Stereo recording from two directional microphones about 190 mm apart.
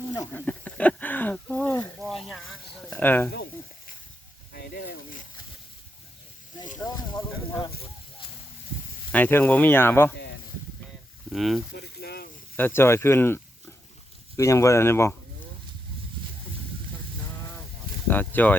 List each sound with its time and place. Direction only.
0.1 s a sound: 10° left (ahead or behind)
3.0 s speech: 10° left (ahead or behind)
4.5 s snake: 55° left (ahead or behind)
6.7 s a sound: 20° left (ahead or behind)
9.1 s speech: 10° left (ahead or behind)
11.3 s speech: centre (ahead or behind)
11.7 s snake: 60° left (ahead or behind)
12.5 s speech: 10° left (ahead or behind)
18.1 s speech: 10° left (ahead or behind)